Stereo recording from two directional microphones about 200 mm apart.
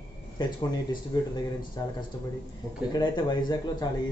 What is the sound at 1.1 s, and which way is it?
Speech, 20° left (ahead or behind).